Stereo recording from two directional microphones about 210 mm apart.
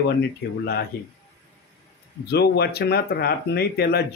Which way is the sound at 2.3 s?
50° left (ahead or behind).